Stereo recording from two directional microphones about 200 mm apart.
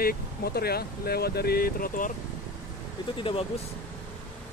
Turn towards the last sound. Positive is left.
turn(degrees=25)  # may be behind; listen again after turning